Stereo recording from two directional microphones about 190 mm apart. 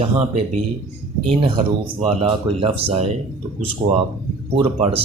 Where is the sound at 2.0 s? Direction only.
30° right (ahead or behind).